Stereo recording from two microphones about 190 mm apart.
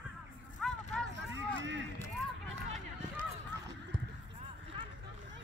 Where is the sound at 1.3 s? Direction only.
75° right (ahead or behind).